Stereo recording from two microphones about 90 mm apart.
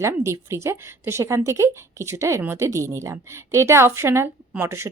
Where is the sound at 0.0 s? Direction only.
30° right (ahead or behind).